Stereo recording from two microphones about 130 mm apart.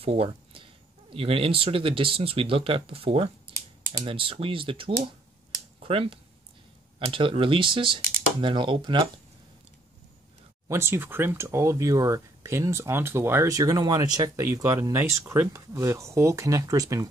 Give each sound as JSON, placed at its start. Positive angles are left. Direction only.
{"t": 0.0, "sound": "a sound", "side_deg": -45}
{"t": 1.1, "sound": "speech", "side_deg": -45}
{"t": 10.7, "sound": "speech", "side_deg": -20}